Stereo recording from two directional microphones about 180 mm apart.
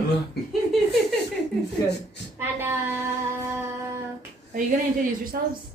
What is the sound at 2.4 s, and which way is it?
Speech, 10° right (ahead or behind).